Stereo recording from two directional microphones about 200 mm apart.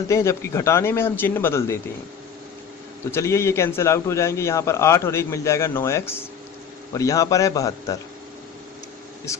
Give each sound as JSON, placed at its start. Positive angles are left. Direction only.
{"t": 0.1, "sound": "a man's voice", "side_deg": 15}
{"t": 3.1, "sound": "a man's voice", "side_deg": 15}